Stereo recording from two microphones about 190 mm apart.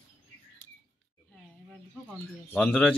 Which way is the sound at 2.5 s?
10° left (ahead or behind).